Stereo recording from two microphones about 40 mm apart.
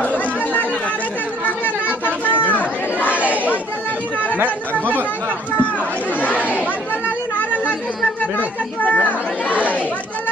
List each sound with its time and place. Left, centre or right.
2.4 s chatter: left
3.1 s chatter: right
7.3 s chatter: left